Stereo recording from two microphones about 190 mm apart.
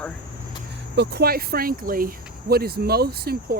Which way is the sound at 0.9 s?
55° right (ahead or behind).